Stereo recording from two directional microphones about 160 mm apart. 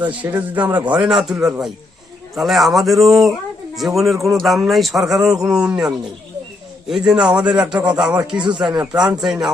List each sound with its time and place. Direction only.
0.1 s a man's voice: 10° right (ahead or behind)
8.4 s speech: 30° right (ahead or behind)
8.8 s speech: 10° right (ahead or behind)